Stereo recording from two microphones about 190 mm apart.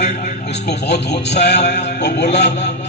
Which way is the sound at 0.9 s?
65° left (ahead or behind).